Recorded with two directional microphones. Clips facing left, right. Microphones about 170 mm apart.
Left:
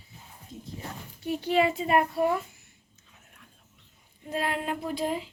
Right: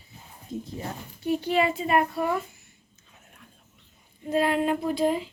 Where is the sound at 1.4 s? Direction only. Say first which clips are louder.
Left 2 dB; 20° left (ahead or behind).